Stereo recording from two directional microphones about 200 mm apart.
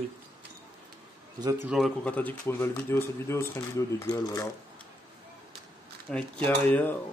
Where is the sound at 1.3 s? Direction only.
20° right (ahead or behind).